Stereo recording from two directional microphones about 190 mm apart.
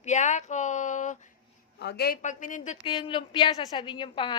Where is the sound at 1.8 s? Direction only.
60° left (ahead or behind).